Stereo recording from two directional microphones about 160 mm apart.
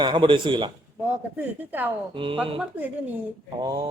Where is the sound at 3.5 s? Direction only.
25° right (ahead or behind).